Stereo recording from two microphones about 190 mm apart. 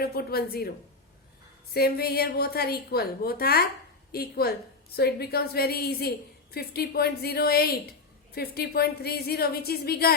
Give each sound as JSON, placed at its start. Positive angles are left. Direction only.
{"t": 0.0, "sound": "a woman's voice", "side_deg": 55}
{"t": 1.7, "sound": "a woman's voice", "side_deg": 55}